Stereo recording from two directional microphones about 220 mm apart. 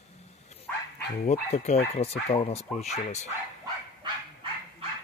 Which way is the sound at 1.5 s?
30° left (ahead or behind).